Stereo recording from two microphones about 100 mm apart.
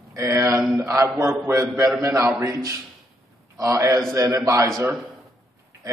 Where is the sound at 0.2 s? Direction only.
25° right (ahead or behind).